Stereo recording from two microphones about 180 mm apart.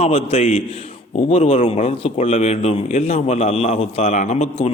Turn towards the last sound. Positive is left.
turn(degrees=35)  # may be behind; listen again after turning